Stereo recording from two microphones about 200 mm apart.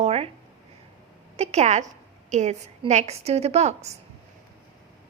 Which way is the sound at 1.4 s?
35° right (ahead or behind).